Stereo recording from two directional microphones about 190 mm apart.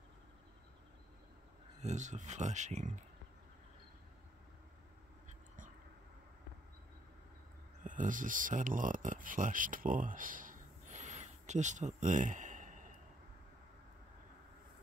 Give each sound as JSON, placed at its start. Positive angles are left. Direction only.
{"t": 1.8, "sound": "speech", "side_deg": -40}
{"t": 7.8, "sound": "speech", "side_deg": -45}